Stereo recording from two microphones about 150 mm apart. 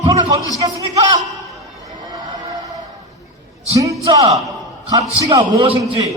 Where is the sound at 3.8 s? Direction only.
25° right (ahead or behind).